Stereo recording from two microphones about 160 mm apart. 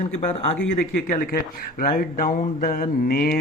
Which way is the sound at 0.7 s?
60° left (ahead or behind).